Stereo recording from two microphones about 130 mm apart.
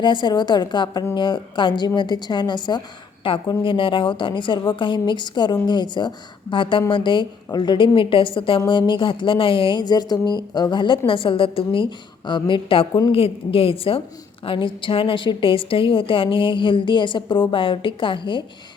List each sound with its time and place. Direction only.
0.0 s a woman's voice: 35° left (ahead or behind)